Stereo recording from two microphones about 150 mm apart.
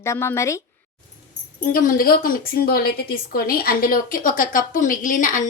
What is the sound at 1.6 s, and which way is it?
A woman's voice, 65° left (ahead or behind).